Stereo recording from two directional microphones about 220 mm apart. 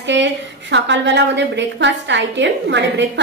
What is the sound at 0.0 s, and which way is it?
A woman's voice, 55° right (ahead or behind).